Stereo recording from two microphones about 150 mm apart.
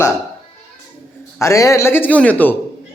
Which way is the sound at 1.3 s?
20° left (ahead or behind).